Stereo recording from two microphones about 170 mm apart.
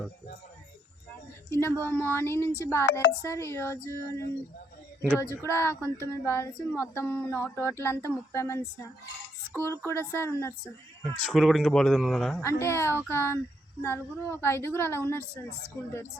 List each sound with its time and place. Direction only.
1.5 s a sound: 15° left (ahead or behind)
1.8 s female singing: 10° left (ahead or behind)
5.0 s speech: 10° right (ahead or behind)
5.3 s female singing: 15° left (ahead or behind)
11.0 s speech: centre (ahead or behind)
12.4 s female singing: 15° left (ahead or behind)